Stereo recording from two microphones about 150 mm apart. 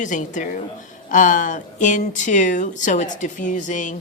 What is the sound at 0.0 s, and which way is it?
Speech, 55° left (ahead or behind).